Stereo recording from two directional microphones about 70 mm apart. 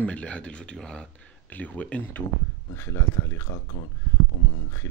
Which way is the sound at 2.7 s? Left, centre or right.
Left.